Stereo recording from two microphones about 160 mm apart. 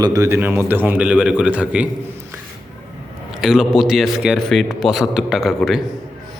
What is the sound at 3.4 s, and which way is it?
Speech, 5° right (ahead or behind).